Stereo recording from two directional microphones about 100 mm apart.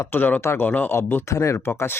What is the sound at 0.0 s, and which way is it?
A man's voice, 20° left (ahead or behind).